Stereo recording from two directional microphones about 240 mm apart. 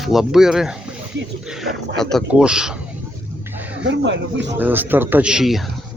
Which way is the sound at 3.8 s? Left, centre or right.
Right.